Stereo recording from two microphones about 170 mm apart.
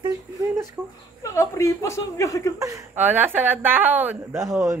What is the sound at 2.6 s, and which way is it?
A woman's voice, 20° right (ahead or behind).